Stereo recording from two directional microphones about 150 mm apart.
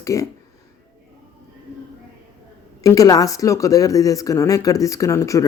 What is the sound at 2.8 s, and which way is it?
Speech, 25° left (ahead or behind).